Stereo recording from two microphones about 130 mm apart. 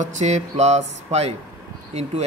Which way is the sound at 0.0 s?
65° right (ahead or behind).